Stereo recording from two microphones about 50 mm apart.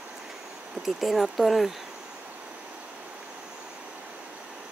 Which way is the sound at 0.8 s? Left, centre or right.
Centre.